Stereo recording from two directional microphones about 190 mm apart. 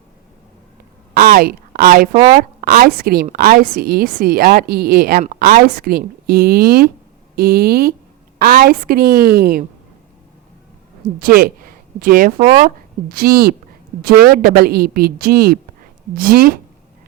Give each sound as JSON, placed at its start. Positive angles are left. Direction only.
{"t": 1.1, "sound": "a sound", "side_deg": -50}
{"t": 2.3, "sound": "a woman's voice", "side_deg": -50}
{"t": 11.2, "sound": "a woman's voice", "side_deg": -50}